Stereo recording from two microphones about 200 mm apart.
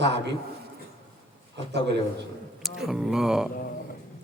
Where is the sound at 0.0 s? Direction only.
60° right (ahead or behind).